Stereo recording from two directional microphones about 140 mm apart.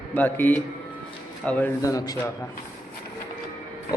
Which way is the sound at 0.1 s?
10° left (ahead or behind).